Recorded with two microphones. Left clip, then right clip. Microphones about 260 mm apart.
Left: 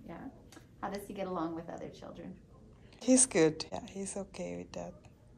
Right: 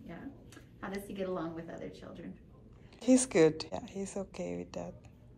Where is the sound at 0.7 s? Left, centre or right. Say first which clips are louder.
Left 1 dB; left.